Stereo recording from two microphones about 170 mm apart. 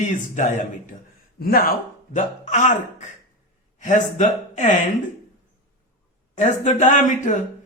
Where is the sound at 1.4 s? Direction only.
60° left (ahead or behind).